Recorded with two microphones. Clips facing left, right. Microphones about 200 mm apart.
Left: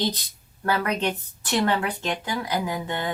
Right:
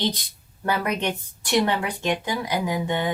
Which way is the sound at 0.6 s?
15° right (ahead or behind).